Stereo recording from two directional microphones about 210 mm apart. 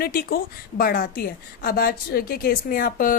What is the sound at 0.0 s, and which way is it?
Speech, 45° left (ahead or behind).